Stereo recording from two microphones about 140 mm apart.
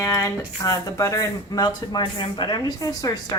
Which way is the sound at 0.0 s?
25° left (ahead or behind).